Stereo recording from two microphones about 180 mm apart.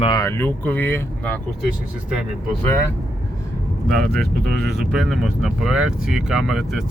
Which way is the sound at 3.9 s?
Centre (ahead or behind).